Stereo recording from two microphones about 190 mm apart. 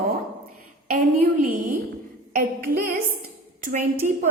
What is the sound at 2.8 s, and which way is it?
A woman's voice, 50° right (ahead or behind).